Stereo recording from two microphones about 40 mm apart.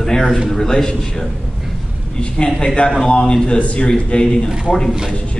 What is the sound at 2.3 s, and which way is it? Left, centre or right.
A man's voice, centre.